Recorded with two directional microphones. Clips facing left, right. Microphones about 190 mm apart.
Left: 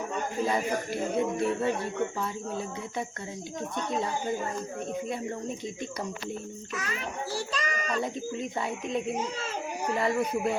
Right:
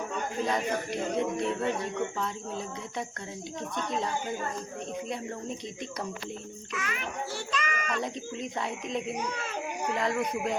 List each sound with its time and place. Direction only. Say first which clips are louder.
0.4 s speech: left 1 dB; 5° left (ahead or behind)
3.9 s speech: left 3 dB; 5° left (ahead or behind)
6.7 s a child's voice: even; 35° left (ahead or behind)
8.0 s speech: left 2 dB; centre (ahead or behind)